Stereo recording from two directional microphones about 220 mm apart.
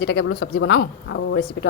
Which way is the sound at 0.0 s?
55° left (ahead or behind).